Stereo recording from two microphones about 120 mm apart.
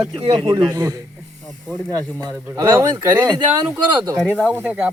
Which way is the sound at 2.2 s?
30° right (ahead or behind).